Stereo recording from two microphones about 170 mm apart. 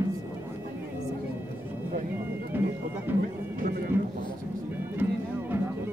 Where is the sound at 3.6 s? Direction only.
65° right (ahead or behind).